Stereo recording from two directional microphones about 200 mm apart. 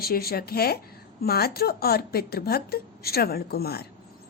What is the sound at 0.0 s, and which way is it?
A woman's voice, 50° left (ahead or behind).